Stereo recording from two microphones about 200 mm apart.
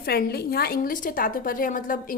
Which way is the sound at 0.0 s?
50° left (ahead or behind).